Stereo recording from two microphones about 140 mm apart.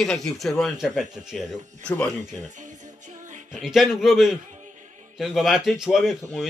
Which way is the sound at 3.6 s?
Centre (ahead or behind).